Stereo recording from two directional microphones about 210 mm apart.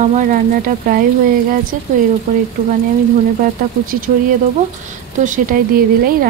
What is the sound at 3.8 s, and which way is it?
Speech, 40° right (ahead or behind).